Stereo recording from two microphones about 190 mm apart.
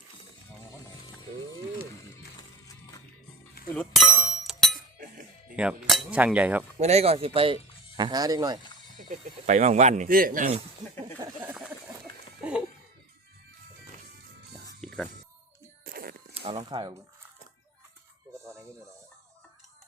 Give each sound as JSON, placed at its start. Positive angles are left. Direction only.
{"t": 3.8, "sound": "bicycle bell", "side_deg": 0}
{"t": 5.5, "sound": "dishes", "side_deg": -5}
{"t": 6.7, "sound": "speech", "side_deg": -35}
{"t": 9.0, "sound": "speech", "side_deg": -40}
{"t": 12.4, "sound": "music", "side_deg": -5}
{"t": 14.8, "sound": "music", "side_deg": 5}
{"t": 15.9, "sound": "a sound", "side_deg": -50}
{"t": 16.3, "sound": "a sound", "side_deg": -30}